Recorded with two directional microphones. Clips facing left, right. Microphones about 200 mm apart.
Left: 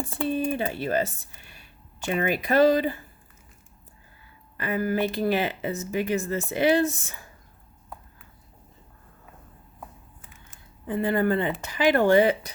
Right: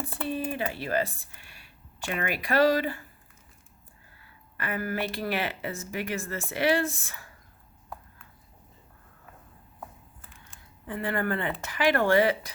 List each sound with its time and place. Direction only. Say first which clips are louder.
0.1 s typing: left 8 dB; 25° left (ahead or behind)
0.6 s speech: left 3 dB; 25° left (ahead or behind)
4.5 s speech: left 6 dB; 20° left (ahead or behind)
10.5 s speech: left 7 dB; 20° left (ahead or behind)